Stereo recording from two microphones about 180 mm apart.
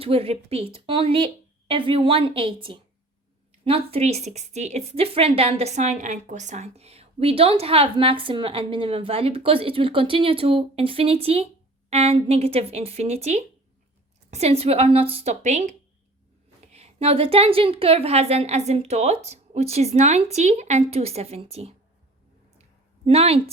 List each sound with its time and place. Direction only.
0.0 s a woman's voice: 30° right (ahead or behind)
16.7 s speech: 35° right (ahead or behind)
23.0 s speech: 35° right (ahead or behind)